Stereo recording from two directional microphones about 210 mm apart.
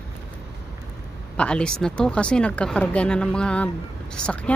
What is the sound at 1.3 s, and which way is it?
Speech, 5° left (ahead or behind).